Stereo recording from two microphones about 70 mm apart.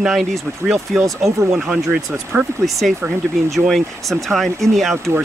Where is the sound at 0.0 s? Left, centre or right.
Centre.